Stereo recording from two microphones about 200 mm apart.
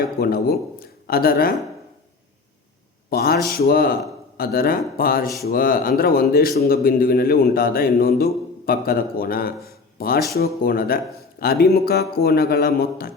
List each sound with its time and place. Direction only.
0.2 s a man's voice: 50° left (ahead or behind)
3.1 s a man's voice: 50° left (ahead or behind)